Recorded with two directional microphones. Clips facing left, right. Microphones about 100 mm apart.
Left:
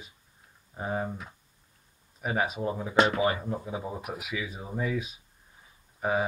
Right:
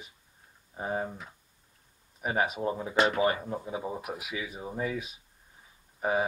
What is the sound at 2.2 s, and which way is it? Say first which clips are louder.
Speech: even; 20° right (ahead or behind).